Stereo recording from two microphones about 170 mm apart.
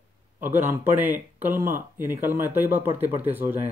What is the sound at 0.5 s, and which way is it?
Speech, 10° right (ahead or behind).